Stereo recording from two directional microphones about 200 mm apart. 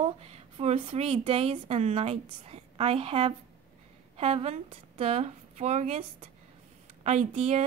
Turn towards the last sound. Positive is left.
turn(degrees=-30)  # may be behind; listen again after turning